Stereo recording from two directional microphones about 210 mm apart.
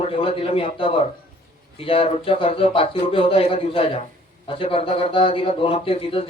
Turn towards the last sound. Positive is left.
turn(degrees=25)  # may be behind; listen again after turning